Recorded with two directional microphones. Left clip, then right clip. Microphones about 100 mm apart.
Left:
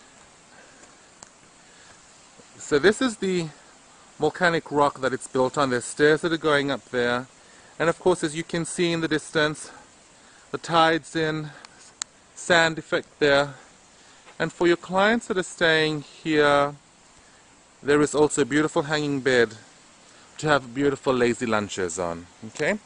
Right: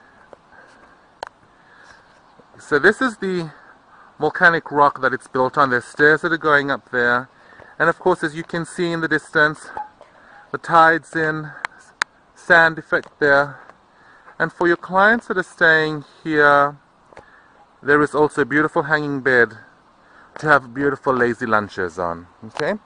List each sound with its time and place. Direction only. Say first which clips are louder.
2.6 s speech: right 5 dB; 15° left (ahead or behind)
17.8 s speech: right 4 dB; 10° left (ahead or behind)